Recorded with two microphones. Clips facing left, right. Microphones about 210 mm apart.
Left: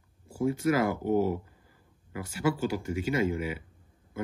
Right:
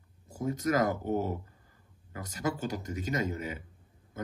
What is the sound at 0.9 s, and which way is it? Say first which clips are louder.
Speech: left 5 dB; 10° left (ahead or behind).